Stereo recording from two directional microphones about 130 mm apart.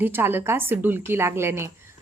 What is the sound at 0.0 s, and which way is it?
A woman's voice, 15° right (ahead or behind).